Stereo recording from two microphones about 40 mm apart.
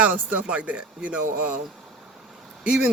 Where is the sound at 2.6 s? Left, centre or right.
Right.